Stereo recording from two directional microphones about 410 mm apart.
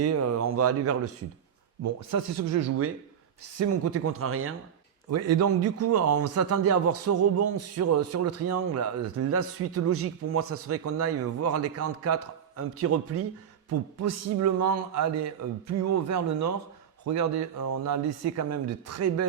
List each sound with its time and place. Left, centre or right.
0.0 s a man's voice: right